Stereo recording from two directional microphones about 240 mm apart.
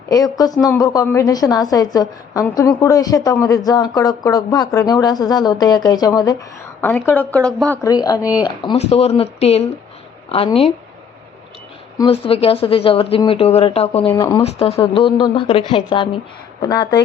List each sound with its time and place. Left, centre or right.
0.1 s a woman's voice: centre
11.9 s a woman's voice: left